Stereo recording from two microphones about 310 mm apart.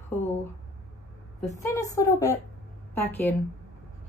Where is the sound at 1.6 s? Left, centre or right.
Centre.